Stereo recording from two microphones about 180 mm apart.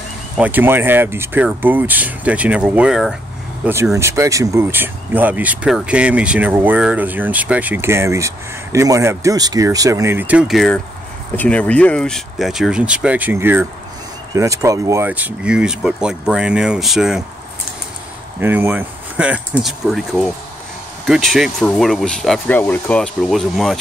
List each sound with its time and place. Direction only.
0.4 s speech: 10° right (ahead or behind)
18.4 s speech: 10° right (ahead or behind)